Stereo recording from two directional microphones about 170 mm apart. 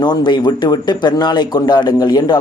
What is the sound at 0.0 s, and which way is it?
A man's voice, 25° left (ahead or behind).